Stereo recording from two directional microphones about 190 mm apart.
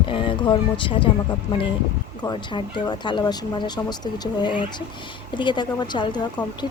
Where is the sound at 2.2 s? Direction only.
20° left (ahead or behind).